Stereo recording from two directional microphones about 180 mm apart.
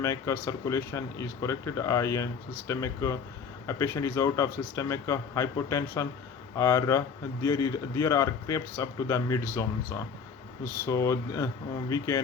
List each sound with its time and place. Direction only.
0.0 s speech: 15° left (ahead or behind)